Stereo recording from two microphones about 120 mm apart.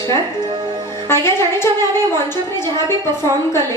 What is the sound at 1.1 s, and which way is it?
A woman's voice, 20° left (ahead or behind).